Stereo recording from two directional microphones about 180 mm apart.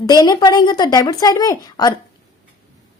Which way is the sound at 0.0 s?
20° left (ahead or behind).